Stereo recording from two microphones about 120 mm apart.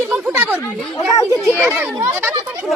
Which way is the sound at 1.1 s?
30° left (ahead or behind).